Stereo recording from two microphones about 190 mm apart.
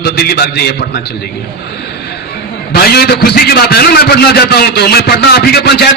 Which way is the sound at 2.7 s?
55° left (ahead or behind).